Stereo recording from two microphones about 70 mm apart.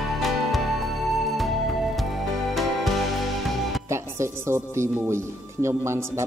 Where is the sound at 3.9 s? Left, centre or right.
Right.